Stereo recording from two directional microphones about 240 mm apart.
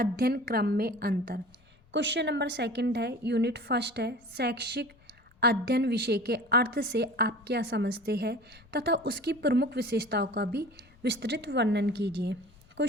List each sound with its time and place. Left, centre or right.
0.0 s a woman's voice: right